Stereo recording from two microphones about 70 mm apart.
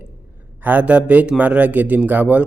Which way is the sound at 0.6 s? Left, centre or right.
Right.